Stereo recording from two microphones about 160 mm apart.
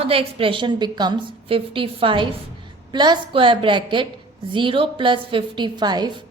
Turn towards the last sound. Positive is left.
turn(degrees=-25)  # may be behind; listen again after turning